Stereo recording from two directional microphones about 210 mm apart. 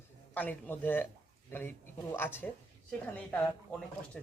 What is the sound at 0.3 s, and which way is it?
Speech, 10° left (ahead or behind).